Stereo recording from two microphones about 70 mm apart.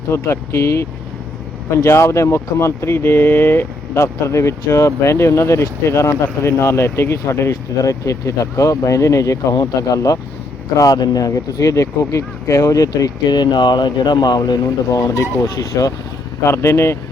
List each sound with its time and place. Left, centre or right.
0.1 s speech: left
7.8 s speech: left
9.6 s speech: left
10.8 s speech: left
13.2 s speech: left
14.8 s speech: left
16.4 s speech: left